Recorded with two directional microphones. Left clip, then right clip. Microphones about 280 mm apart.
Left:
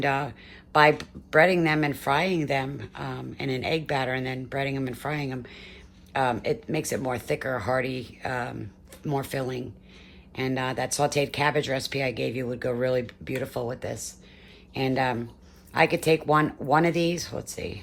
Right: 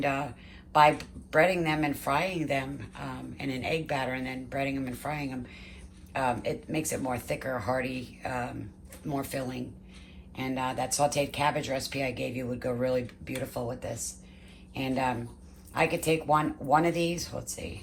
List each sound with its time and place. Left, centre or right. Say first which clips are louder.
0.0 s speech: left 4 dB; left